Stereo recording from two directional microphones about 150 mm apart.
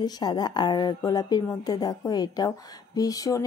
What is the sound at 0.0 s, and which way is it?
A woman's voice, 25° left (ahead or behind).